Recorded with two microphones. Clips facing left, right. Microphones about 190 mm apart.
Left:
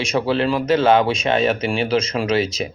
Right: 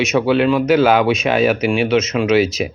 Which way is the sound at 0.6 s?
25° left (ahead or behind).